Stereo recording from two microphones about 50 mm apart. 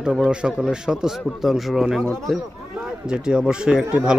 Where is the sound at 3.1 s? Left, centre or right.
Centre.